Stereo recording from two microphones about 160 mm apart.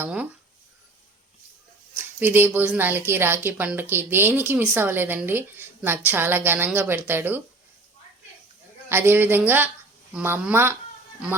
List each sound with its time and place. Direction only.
0.0 s a woman's voice: 10° right (ahead or behind)
2.1 s a woman's voice: 10° right (ahead or behind)
8.9 s a woman's voice: 15° right (ahead or behind)